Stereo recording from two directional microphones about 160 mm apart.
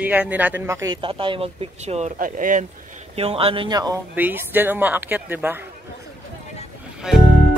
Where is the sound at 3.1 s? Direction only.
35° right (ahead or behind).